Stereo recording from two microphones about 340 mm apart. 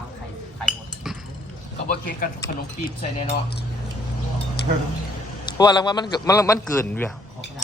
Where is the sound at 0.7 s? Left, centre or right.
Centre.